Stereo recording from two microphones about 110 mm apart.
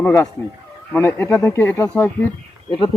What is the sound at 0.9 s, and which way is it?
Speech, 20° left (ahead or behind).